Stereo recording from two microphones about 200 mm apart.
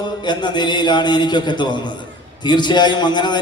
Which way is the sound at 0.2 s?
20° left (ahead or behind).